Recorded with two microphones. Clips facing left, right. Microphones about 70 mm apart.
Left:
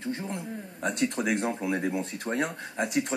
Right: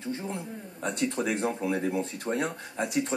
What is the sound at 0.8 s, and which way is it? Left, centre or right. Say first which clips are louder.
Speech: left 1 dB; centre.